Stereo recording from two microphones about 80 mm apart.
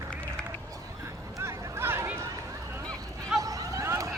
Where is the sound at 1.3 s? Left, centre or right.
Right.